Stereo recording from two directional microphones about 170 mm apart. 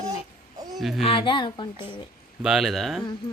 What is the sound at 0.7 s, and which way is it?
Speech, centre (ahead or behind).